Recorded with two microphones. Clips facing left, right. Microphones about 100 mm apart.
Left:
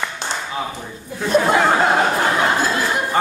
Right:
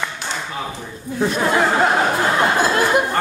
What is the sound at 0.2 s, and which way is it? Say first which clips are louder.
Clapping: left 2 dB; 25° left (ahead or behind).